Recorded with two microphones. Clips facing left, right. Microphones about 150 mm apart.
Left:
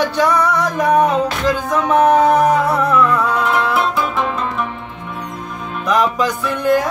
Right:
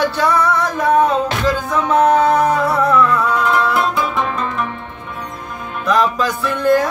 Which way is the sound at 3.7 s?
Centre (ahead or behind).